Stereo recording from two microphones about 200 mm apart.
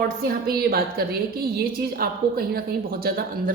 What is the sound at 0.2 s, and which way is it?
A woman's voice, 50° right (ahead or behind).